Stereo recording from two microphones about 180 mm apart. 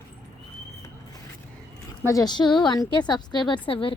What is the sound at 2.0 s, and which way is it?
A woman's voice, 20° left (ahead or behind).